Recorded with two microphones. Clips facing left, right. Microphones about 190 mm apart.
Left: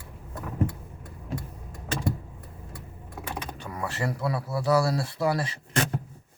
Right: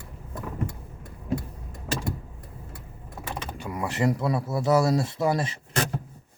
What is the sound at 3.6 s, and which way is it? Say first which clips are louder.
Speech: right 6 dB; 15° right (ahead or behind).